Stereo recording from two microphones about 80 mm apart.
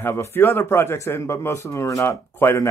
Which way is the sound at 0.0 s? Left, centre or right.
Left.